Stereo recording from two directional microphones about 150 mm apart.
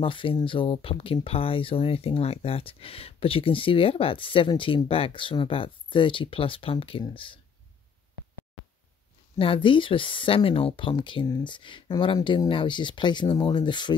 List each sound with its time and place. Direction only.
0.0 s speech: 35° left (ahead or behind)
9.4 s speech: 35° left (ahead or behind)